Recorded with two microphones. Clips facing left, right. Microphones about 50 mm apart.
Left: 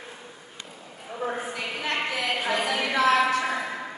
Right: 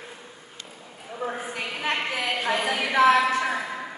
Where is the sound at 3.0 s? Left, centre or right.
Right.